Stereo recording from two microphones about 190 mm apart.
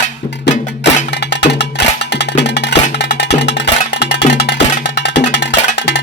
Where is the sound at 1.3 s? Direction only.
65° left (ahead or behind).